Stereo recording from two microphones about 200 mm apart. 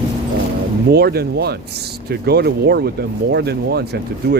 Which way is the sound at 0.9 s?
55° right (ahead or behind).